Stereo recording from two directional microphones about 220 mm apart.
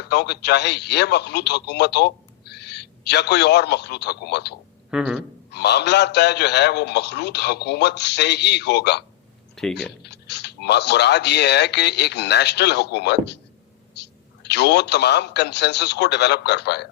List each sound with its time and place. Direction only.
0.1 s speech: 50° left (ahead or behind)
4.9 s speech: centre (ahead or behind)
5.5 s speech: 50° left (ahead or behind)